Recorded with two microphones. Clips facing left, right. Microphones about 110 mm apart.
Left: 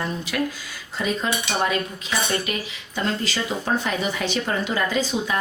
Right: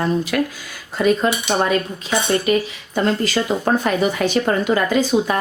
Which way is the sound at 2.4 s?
45° right (ahead or behind).